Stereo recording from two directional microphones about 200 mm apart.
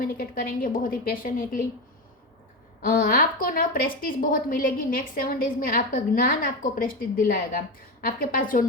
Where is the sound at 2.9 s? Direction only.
45° left (ahead or behind).